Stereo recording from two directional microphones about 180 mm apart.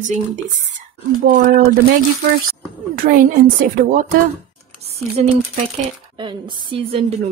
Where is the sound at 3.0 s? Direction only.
50° right (ahead or behind).